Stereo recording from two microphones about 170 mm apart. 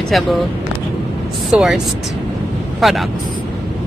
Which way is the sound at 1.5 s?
5° right (ahead or behind).